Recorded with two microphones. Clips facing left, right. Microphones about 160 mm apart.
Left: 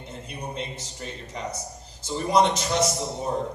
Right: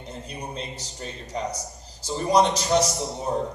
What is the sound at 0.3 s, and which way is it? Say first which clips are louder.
A man's voice: left 2 dB; 35° right (ahead or behind).